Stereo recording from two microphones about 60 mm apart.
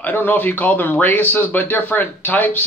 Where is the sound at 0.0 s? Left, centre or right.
Left.